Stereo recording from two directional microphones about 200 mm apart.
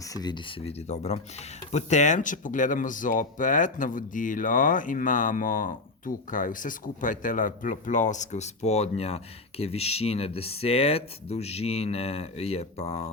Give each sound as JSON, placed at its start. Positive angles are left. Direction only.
{"t": 0.1, "sound": "speech", "side_deg": 20}